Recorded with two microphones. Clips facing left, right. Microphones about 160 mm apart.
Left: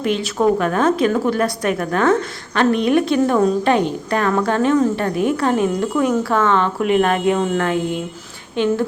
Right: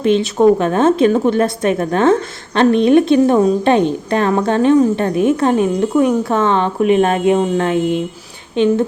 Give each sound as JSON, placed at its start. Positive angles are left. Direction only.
{"t": 0.0, "sound": "speech", "side_deg": -25}